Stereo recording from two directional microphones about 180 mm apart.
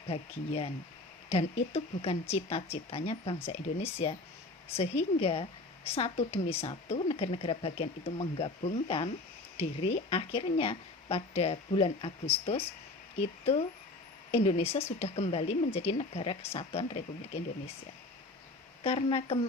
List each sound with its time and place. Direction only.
0.1 s a woman's voice: 35° left (ahead or behind)
18.8 s a woman's voice: 30° left (ahead or behind)